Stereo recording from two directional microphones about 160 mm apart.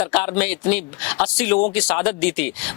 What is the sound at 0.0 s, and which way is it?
Speech, 10° left (ahead or behind).